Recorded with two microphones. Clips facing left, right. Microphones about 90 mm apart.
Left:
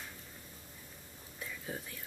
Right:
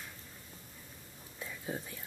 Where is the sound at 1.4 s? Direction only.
20° right (ahead or behind).